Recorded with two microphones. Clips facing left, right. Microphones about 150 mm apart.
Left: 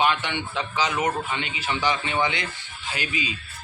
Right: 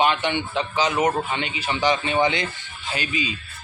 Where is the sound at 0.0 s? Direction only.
20° right (ahead or behind).